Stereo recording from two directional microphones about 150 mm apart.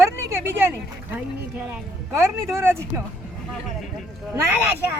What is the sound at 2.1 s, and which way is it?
Speech, 20° right (ahead or behind).